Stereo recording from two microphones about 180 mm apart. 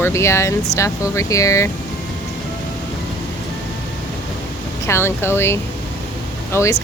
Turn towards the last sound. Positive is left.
turn(degrees=15)  # may be behind; listen again after turning